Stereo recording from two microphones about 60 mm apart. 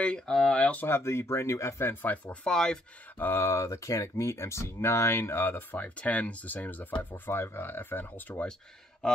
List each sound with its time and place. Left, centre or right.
0.3 s speech: centre
0.6 s speech: centre
0.8 s speech: left
2.4 s speech: centre
3.2 s speech: left
5.9 s speech: left
9.0 s speech: centre